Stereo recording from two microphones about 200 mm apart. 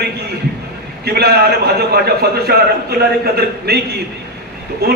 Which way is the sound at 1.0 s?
50° right (ahead or behind).